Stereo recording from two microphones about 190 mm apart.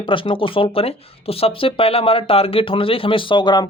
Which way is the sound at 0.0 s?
25° left (ahead or behind).